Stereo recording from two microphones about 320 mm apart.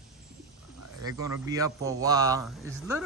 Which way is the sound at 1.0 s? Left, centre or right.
Centre.